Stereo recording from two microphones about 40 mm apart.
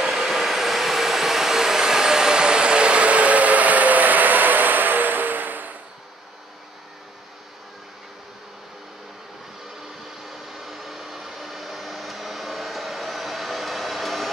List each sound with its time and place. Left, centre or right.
0.0 s vacuum cleaner: centre; by 5.8 s right
10.2 s vacuum cleaner: centre